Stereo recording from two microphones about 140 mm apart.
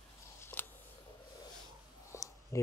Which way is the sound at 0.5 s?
10° left (ahead or behind).